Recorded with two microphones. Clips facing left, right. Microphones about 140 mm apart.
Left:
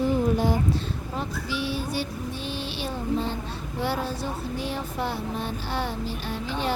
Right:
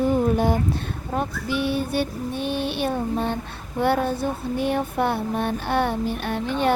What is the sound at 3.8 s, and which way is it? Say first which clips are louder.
Speech: right 7 dB; 55° right (ahead or behind).